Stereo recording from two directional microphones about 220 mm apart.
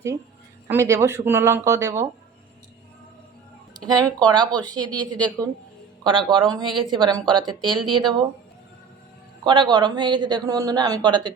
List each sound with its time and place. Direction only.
0.7 s speech: 15° right (ahead or behind)
3.8 s a man's voice: 15° right (ahead or behind)
9.4 s a man's voice: 20° right (ahead or behind)